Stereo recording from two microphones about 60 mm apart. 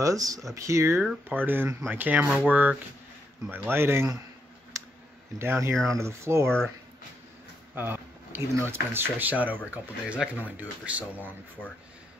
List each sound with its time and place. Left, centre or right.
0.0 s speech: right
0.6 s speech: right
1.3 s speech: right
3.4 s speech: right
4.7 s a sound: right
5.4 s speech: right
7.7 s a sound: right
8.6 s speech: right